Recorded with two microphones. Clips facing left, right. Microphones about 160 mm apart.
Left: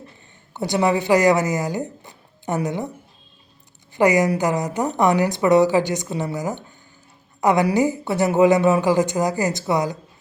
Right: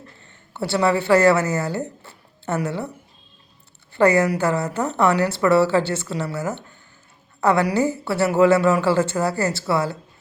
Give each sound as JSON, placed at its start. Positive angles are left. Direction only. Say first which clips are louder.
{"t": 0.5, "sound": "speech", "louder": "even", "side_deg": 15}
{"t": 3.9, "sound": "a woman's voice", "louder": "even", "side_deg": 15}